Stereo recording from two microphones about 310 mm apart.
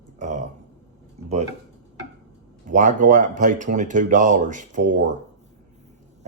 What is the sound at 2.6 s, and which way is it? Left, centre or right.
Speech, right.